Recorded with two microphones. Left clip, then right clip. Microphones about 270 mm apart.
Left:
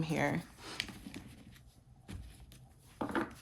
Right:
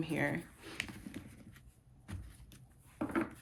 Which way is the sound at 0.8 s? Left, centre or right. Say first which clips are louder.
Even; centre.